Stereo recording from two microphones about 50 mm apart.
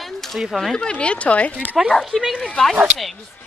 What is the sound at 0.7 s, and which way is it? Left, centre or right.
Speech, centre.